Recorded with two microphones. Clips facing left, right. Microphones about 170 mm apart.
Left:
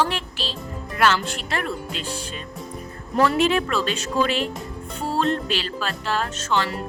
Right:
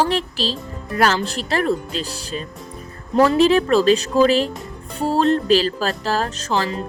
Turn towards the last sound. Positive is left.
turn(degrees=-35)  # may be behind; listen again after turning